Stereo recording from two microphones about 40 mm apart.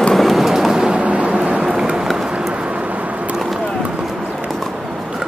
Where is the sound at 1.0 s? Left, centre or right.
Right.